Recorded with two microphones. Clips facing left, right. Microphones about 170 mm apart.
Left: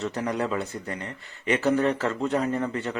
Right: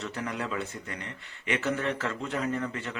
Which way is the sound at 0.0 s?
35° left (ahead or behind).